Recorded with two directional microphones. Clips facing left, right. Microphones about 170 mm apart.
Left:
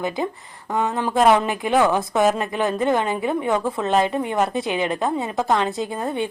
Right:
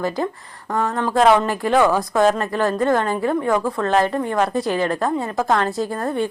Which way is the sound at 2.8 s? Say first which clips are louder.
Right 1 dB; 15° left (ahead or behind).